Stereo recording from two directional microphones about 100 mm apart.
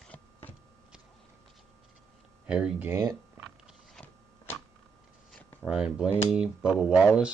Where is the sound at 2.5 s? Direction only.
10° right (ahead or behind).